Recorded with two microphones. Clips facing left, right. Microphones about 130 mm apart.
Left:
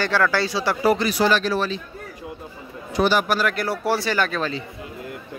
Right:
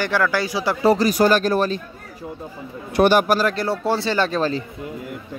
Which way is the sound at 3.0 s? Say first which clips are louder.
Right 4 dB; 50° right (ahead or behind).